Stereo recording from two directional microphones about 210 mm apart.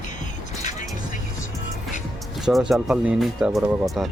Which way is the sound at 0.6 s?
35° left (ahead or behind).